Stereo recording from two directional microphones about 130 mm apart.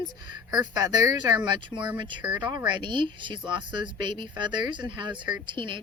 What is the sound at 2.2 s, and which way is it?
Speech, 10° right (ahead or behind).